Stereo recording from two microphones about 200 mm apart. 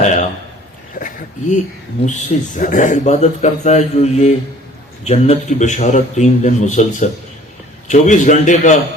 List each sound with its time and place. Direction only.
0.0 s a man's voice: 35° left (ahead or behind)